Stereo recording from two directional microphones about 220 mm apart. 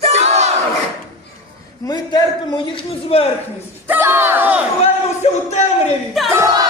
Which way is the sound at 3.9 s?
10° right (ahead or behind).